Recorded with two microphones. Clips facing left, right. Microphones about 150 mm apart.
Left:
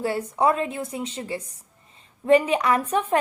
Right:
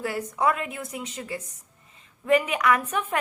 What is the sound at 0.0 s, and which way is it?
A woman's voice, 30° left (ahead or behind).